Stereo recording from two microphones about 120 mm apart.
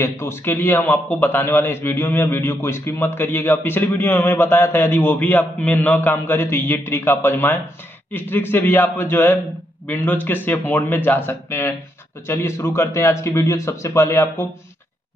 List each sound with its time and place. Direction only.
0.0 s a man's voice: 20° left (ahead or behind)